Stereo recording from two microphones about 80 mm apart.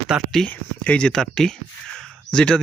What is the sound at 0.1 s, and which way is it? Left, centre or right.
Speech, centre.